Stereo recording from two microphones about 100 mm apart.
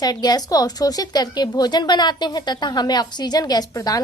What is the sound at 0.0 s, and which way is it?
A woman's voice, 40° left (ahead or behind).